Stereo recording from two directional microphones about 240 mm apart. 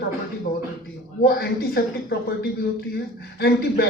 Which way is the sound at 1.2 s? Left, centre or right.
Left.